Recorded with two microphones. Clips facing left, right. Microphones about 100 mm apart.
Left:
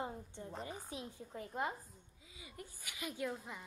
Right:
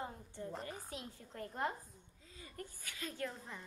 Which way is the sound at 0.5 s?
5° left (ahead or behind).